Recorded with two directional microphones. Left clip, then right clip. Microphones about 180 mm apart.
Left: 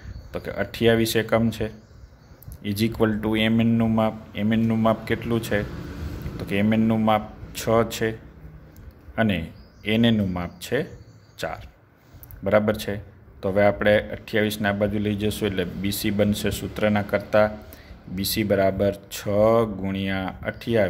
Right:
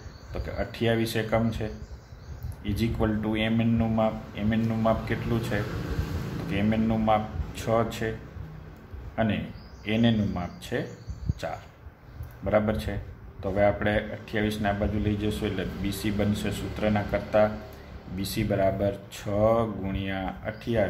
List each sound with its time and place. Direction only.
0.3 s speech: 60° left (ahead or behind)
9.1 s speech: 55° left (ahead or behind)
12.4 s speech: 55° left (ahead or behind)